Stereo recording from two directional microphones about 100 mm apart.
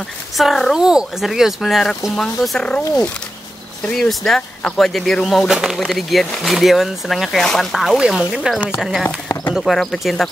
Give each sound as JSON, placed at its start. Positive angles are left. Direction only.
{"t": 0.4, "sound": "speech", "side_deg": 0}
{"t": 3.9, "sound": "speech", "side_deg": 5}
{"t": 9.3, "sound": "clip-clop", "side_deg": 25}
{"t": 9.6, "sound": "speech", "side_deg": 0}